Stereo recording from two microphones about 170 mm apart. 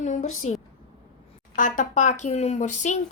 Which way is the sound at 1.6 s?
50° left (ahead or behind).